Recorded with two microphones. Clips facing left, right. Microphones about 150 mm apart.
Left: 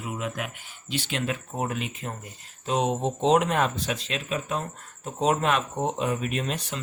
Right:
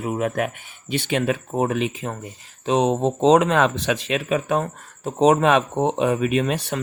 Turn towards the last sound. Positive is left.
turn(degrees=-90)